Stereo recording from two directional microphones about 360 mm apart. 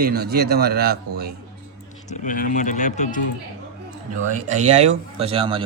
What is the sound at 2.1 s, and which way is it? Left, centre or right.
Speech, left.